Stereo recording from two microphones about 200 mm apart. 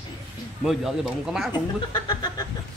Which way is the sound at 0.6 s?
Centre (ahead or behind).